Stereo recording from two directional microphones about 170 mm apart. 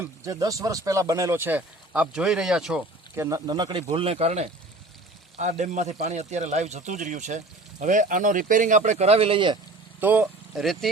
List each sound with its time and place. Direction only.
0.0 s speech: 20° right (ahead or behind); by 2.8 s 5° right (ahead or behind)
3.2 s a man's voice: 20° right (ahead or behind)
10.0 s speech: 10° right (ahead or behind)